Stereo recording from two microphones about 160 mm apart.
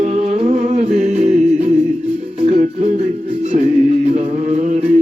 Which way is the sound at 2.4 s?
50° right (ahead or behind).